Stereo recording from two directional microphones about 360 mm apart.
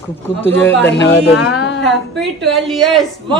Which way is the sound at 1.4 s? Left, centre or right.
Left.